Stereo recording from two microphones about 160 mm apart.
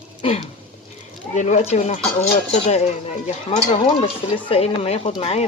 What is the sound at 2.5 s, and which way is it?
Speech, 40° left (ahead or behind).